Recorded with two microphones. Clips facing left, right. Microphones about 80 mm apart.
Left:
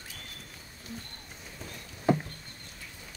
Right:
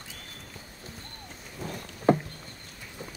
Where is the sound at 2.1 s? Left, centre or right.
Right.